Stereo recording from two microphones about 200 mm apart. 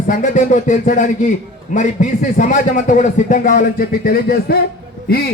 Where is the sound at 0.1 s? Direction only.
40° left (ahead or behind).